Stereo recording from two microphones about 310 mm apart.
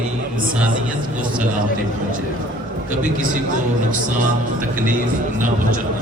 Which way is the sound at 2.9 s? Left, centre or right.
Right.